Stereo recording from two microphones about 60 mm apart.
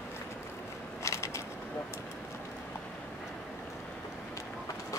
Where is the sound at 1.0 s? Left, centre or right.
Left.